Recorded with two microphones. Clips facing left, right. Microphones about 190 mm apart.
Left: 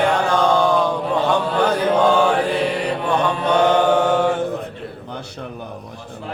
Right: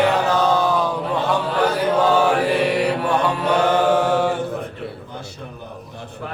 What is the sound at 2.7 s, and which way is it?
Mantra, 10° right (ahead or behind).